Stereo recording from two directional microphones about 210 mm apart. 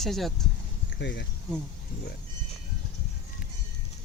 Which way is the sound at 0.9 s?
55° left (ahead or behind).